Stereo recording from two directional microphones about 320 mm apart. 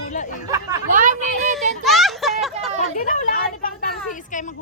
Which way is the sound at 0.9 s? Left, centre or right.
Right.